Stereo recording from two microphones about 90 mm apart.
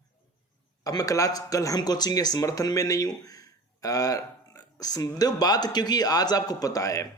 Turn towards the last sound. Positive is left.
turn(degrees=35)  # may be behind; listen again after turning